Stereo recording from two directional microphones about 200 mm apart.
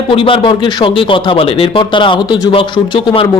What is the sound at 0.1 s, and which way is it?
Speech, 25° left (ahead or behind).